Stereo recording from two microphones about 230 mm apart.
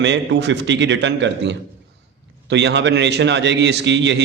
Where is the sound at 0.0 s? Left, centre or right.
Right.